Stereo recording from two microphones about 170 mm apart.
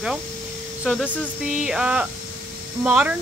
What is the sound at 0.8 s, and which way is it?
Speech, 5° right (ahead or behind).